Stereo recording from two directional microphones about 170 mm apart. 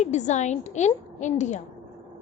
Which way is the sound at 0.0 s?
45° left (ahead or behind).